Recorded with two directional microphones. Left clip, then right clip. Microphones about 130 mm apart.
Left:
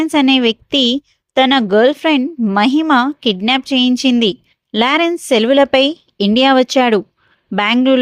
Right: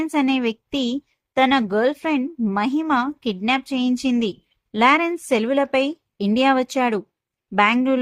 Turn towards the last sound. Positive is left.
turn(degrees=55)  # may be behind; listen again after turning